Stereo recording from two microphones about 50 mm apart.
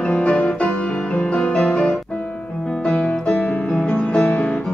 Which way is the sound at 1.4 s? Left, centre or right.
Centre.